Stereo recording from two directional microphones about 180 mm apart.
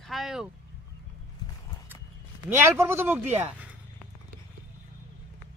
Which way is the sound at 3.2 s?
40° right (ahead or behind).